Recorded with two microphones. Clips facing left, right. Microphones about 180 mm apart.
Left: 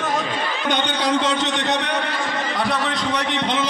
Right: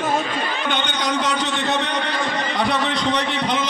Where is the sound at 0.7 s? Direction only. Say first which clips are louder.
Left 5 dB; 30° left (ahead or behind).